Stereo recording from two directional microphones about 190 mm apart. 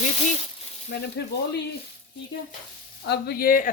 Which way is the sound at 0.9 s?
55° left (ahead or behind).